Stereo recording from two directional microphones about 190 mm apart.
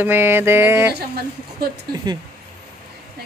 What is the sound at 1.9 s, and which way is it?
Speech, 20° right (ahead or behind).